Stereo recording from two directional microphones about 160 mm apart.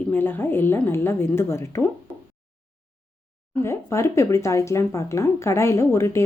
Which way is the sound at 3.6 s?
15° left (ahead or behind).